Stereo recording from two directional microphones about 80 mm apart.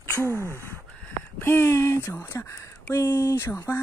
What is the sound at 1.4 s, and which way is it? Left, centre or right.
Speech, left.